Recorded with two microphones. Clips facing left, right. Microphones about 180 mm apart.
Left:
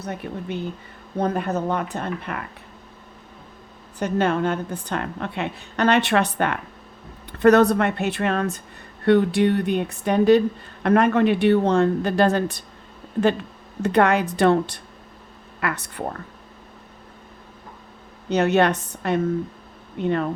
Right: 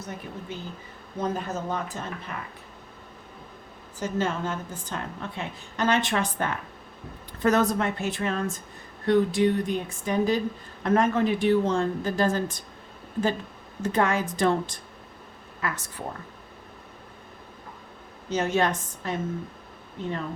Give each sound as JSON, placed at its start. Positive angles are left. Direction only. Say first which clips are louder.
{"t": 0.0, "sound": "a woman's voice", "louder": "left 6 dB", "side_deg": 65}
{"t": 4.0, "sound": "a woman's voice", "louder": "left 7 dB", "side_deg": 65}
{"t": 13.8, "sound": "a woman's voice", "louder": "left 6 dB", "side_deg": 65}
{"t": 18.3, "sound": "a woman's voice", "louder": "left 6 dB", "side_deg": 65}